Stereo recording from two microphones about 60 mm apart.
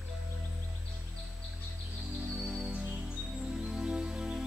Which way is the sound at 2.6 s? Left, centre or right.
Centre.